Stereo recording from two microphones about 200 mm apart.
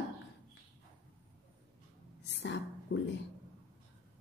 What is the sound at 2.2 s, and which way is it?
Whispering, 60° left (ahead or behind).